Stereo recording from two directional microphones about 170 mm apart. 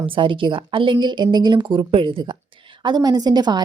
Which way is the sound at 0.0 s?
30° right (ahead or behind).